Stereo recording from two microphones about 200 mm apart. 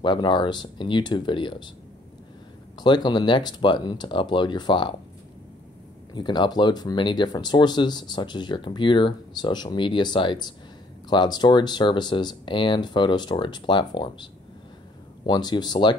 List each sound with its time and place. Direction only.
0.0 s speech: 25° left (ahead or behind)
2.8 s speech: 20° left (ahead or behind)
6.1 s speech: 25° left (ahead or behind)
15.2 s speech: 25° left (ahead or behind)